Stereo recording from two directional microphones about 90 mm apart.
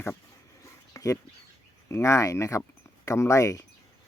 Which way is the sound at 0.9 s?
35° left (ahead or behind).